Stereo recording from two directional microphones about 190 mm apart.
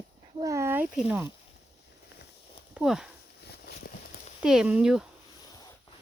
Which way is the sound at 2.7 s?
5° right (ahead or behind).